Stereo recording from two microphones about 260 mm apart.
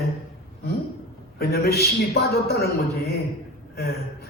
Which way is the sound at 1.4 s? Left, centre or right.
Left.